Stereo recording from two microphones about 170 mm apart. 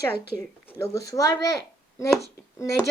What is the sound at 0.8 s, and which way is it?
A woman's voice, 20° left (ahead or behind).